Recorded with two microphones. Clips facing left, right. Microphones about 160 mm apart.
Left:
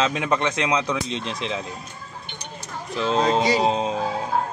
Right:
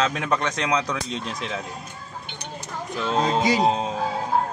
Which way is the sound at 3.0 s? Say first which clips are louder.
Left 2 dB; 30° left (ahead or behind).